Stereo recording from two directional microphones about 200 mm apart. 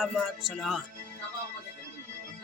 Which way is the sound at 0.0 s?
Centre (ahead or behind).